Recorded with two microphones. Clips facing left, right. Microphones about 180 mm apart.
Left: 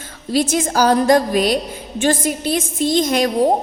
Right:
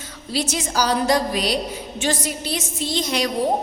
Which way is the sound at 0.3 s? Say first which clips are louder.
Left 6 dB; 50° left (ahead or behind).